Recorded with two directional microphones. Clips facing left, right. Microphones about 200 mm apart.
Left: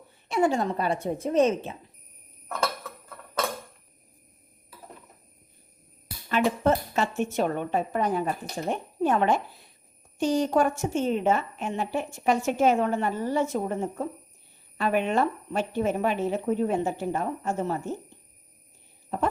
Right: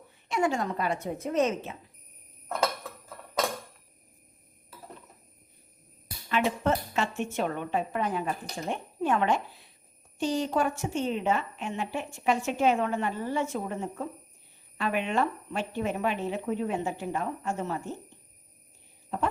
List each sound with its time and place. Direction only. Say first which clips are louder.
0.3 s a woman's voice: left 4 dB; 35° left (ahead or behind)
6.2 s a woman's voice: left 4 dB; 40° left (ahead or behind)